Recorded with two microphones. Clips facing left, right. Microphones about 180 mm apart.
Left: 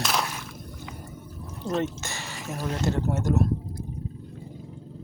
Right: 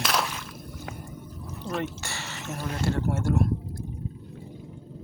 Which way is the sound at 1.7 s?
20° left (ahead or behind).